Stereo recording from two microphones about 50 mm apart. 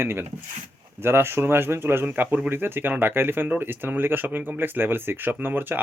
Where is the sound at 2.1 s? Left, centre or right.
Right.